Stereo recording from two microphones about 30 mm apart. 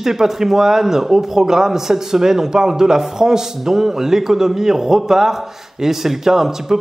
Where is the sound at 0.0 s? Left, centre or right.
Centre.